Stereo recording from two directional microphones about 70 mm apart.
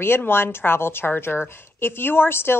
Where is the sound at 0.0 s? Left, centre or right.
Left.